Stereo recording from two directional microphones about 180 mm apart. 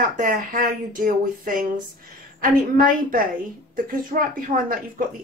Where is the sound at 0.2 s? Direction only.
50° right (ahead or behind).